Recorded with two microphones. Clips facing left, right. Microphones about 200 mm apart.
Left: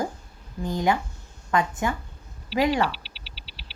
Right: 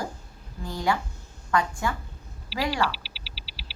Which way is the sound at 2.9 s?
Centre (ahead or behind).